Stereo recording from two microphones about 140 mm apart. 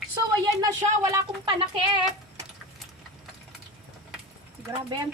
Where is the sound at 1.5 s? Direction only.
35° right (ahead or behind).